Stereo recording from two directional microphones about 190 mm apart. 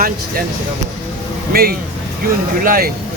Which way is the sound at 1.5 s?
50° right (ahead or behind).